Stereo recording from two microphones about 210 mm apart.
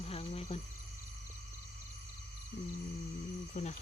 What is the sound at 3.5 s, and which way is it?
Speech, 35° left (ahead or behind).